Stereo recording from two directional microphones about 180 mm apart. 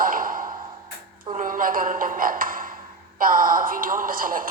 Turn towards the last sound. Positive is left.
turn(degrees=-50)  # may be behind; listen again after turning